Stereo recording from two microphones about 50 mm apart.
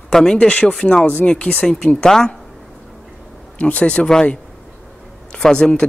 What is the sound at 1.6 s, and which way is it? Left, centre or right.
Speech, centre.